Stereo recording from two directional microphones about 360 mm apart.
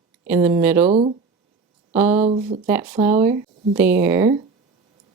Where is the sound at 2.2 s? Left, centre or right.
Centre.